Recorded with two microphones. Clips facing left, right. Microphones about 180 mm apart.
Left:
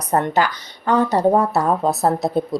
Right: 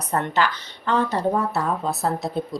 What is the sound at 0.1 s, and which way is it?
Speech, 40° left (ahead or behind).